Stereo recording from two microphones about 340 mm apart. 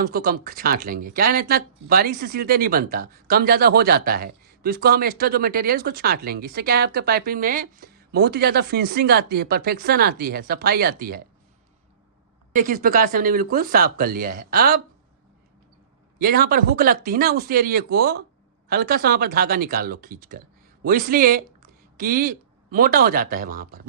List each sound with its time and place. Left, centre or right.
0.1 s speech: right
12.5 s speech: right
16.1 s speech: right